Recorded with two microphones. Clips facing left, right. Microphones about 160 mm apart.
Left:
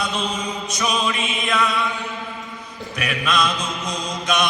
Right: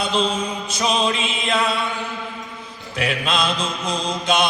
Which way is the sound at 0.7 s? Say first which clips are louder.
Right 3 dB; 30° right (ahead or behind).